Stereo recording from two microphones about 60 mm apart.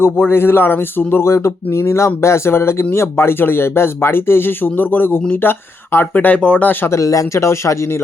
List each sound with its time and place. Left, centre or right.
0.0 s speech: left
1.2 s speech: left
6.1 s speech: left
6.7 s speech: left
6.9 s speech: left
7.3 s speech: left